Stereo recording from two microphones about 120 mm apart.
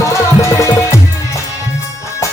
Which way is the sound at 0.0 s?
25° left (ahead or behind).